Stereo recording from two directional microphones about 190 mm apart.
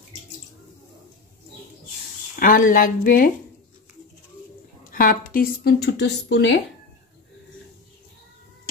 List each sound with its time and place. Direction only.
2.3 s speech: 45° left (ahead or behind)
4.9 s a woman's voice: 45° left (ahead or behind); by 6.6 s 65° left (ahead or behind)